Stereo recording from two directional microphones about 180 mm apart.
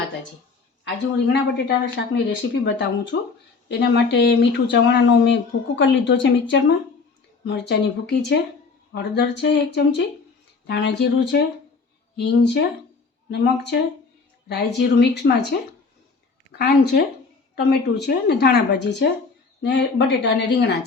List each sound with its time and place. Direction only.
1.3 s speech: 70° left (ahead or behind)
3.7 s speech: 65° left (ahead or behind); by 6.7 s 90° left
7.4 s speech: 75° left (ahead or behind)
16.5 s a woman's voice: 65° left (ahead or behind)